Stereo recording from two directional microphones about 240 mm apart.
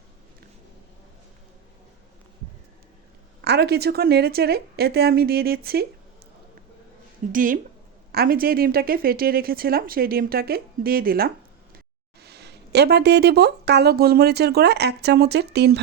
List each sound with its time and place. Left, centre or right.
3.4 s speech: right
7.3 s speech: right